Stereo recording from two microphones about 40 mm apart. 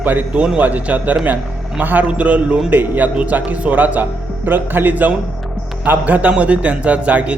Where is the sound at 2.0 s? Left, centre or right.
Right.